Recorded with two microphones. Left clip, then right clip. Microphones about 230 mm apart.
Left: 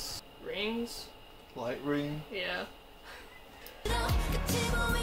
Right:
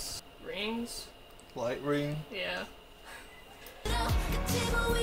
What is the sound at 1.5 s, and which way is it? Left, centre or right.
Speech, right.